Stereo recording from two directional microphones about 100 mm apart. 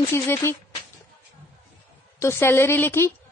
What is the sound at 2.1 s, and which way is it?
Speech, 25° left (ahead or behind).